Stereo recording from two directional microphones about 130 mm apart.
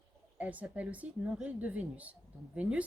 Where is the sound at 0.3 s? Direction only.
10° right (ahead or behind).